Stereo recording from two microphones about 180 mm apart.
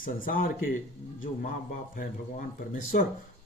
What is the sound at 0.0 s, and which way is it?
Speech, 50° left (ahead or behind).